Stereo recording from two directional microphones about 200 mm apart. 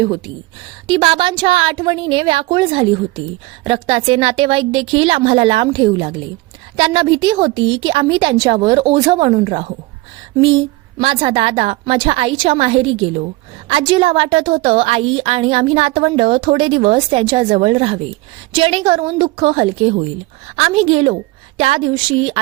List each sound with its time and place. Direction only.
0.9 s a woman's voice: 25° right (ahead or behind)